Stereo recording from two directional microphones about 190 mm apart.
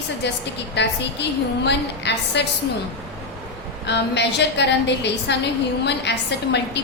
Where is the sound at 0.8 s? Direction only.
65° left (ahead or behind).